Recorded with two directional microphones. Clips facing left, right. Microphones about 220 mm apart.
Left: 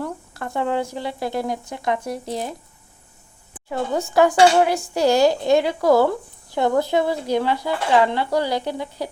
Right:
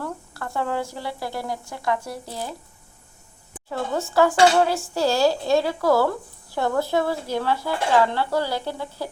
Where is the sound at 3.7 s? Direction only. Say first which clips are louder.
Left 3 dB; 15° left (ahead or behind).